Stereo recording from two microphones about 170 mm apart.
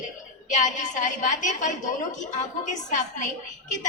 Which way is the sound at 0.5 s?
45° left (ahead or behind).